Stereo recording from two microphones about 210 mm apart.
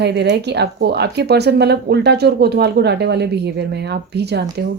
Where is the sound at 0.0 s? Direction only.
55° right (ahead or behind).